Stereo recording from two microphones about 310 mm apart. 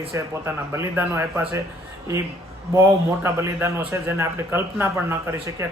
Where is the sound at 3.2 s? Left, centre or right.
Centre.